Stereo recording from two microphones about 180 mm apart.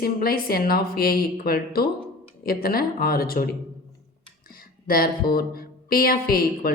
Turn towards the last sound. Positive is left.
turn(degrees=55)  # may be behind; listen again after turning